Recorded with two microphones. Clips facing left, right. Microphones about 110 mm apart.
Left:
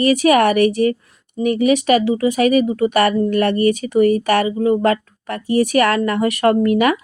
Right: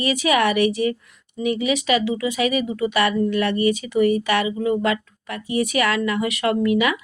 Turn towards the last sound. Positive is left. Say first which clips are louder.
# left 5 dB
turn(degrees=50)  # may be behind; listen again after turning